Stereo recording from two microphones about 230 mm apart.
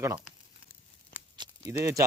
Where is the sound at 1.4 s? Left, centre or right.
Centre.